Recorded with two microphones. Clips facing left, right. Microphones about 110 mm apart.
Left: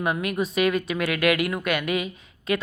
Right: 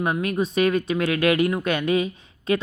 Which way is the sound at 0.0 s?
30° right (ahead or behind).